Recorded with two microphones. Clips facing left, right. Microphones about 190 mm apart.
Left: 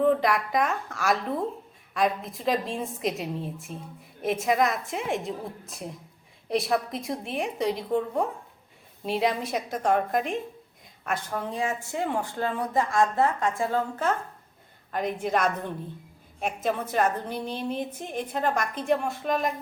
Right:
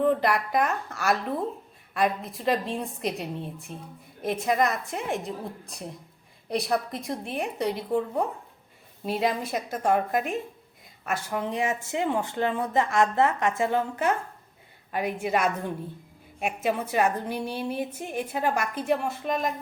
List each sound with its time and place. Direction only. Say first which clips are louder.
0.0 s a woman's voice: left 1 dB; centre (ahead or behind)
11.3 s a woman's voice: right 3 dB; 15° right (ahead or behind); by 19.5 s centre (ahead or behind)